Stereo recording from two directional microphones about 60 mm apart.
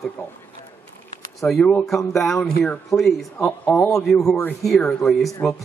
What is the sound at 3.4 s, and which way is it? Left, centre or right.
Speech, left.